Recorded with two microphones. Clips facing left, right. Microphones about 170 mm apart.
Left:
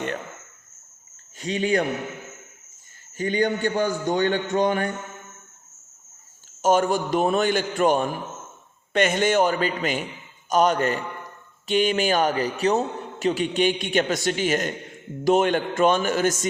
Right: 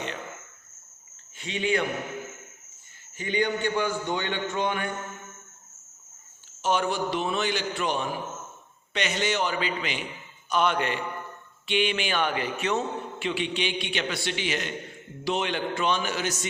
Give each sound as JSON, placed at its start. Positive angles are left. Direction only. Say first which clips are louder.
{"t": 1.4, "sound": "speech", "louder": "left 4 dB", "side_deg": 40}
{"t": 3.2, "sound": "a man's voice", "louder": "left 4 dB", "side_deg": 45}
{"t": 6.6, "sound": "a man's voice", "louder": "left 6 dB", "side_deg": 45}